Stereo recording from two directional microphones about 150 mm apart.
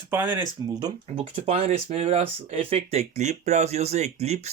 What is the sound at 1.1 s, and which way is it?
Speech, 40° right (ahead or behind).